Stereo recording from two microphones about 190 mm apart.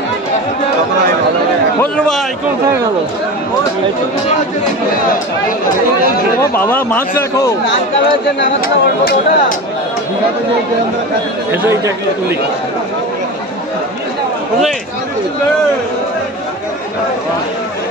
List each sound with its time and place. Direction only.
1.8 s a man's voice: centre (ahead or behind)
6.5 s speech: 10° left (ahead or behind)
8.5 s speech: 50° left (ahead or behind)
11.5 s speech: 10° right (ahead or behind)